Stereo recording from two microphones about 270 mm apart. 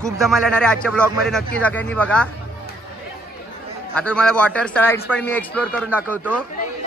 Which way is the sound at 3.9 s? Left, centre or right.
Centre.